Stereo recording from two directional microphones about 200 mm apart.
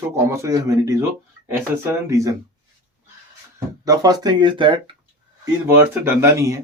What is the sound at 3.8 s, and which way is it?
Speech, 20° right (ahead or behind).